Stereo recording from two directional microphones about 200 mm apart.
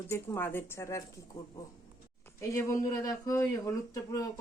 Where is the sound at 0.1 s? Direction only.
10° left (ahead or behind).